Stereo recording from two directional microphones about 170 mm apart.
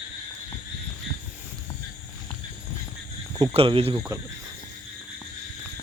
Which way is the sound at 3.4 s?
35° right (ahead or behind).